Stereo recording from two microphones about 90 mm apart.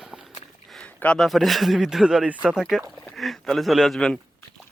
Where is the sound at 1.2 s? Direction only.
Centre (ahead or behind).